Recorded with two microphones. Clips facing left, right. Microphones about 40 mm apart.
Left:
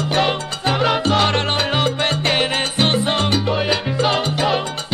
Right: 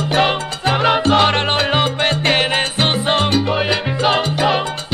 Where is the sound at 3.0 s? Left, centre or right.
Centre.